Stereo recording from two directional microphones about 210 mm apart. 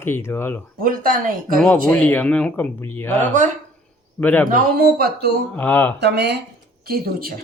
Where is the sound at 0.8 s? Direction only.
40° right (ahead or behind).